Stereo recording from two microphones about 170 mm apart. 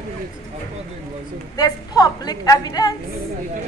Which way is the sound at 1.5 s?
20° left (ahead or behind).